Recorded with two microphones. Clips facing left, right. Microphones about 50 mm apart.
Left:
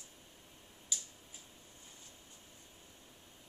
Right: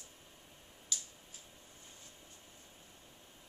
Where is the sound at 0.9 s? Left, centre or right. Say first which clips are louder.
Even; centre.